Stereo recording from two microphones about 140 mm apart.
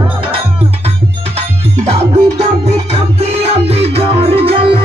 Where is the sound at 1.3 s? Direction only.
50° right (ahead or behind).